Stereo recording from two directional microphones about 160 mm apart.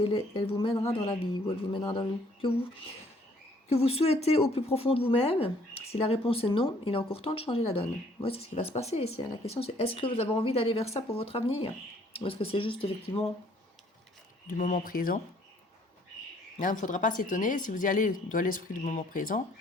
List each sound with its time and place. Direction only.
0.0 s a woman's voice: 35° left (ahead or behind)
3.7 s a woman's voice: 40° left (ahead or behind)
14.4 s speech: 60° left (ahead or behind)
16.6 s speech: 55° left (ahead or behind)